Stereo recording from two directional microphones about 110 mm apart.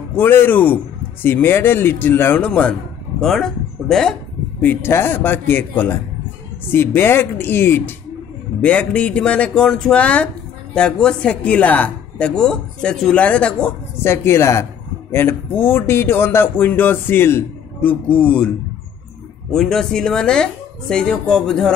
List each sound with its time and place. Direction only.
0.1 s speech: 20° left (ahead or behind)
14.0 s speech: 25° left (ahead or behind)
19.5 s speech: 5° left (ahead or behind)